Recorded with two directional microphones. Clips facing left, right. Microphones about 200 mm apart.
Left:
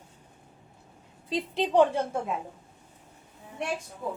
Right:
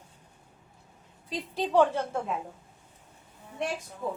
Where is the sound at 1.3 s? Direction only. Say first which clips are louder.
Left 2 dB; 20° left (ahead or behind).